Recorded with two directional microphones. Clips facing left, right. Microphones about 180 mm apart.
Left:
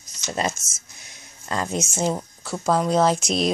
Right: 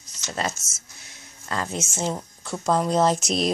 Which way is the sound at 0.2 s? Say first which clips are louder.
Left 3 dB; 15° left (ahead or behind).